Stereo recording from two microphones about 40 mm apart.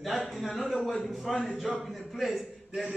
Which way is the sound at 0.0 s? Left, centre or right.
Centre.